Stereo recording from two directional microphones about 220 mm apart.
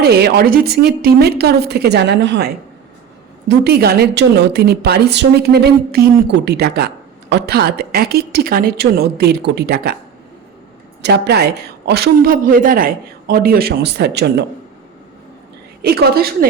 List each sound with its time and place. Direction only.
0.0 s a woman's voice: 45° right (ahead or behind)
3.6 s a woman's voice: 45° right (ahead or behind)
11.0 s a woman's voice: 50° right (ahead or behind)
15.8 s a woman's voice: 45° right (ahead or behind)